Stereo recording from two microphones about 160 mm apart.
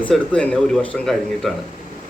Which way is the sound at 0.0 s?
10° left (ahead or behind).